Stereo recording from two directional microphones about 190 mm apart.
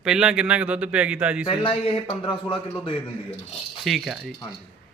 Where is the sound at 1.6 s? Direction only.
25° left (ahead or behind).